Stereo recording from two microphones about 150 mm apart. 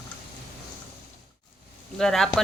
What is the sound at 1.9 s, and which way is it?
Speech, 5° left (ahead or behind).